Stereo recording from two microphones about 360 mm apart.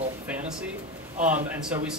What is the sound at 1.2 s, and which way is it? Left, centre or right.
Speech, centre.